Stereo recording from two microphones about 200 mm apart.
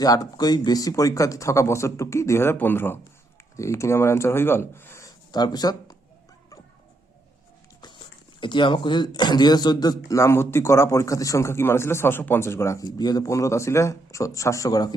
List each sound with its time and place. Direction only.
0.0 s speech: 20° left (ahead or behind)
7.8 s speech: 20° left (ahead or behind)